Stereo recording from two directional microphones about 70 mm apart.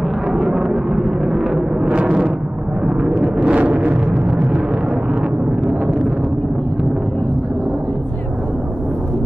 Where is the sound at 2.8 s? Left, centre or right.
Centre.